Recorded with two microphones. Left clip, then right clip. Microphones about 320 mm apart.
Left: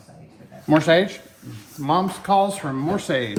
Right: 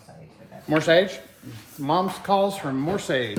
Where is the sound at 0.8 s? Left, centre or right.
Centre.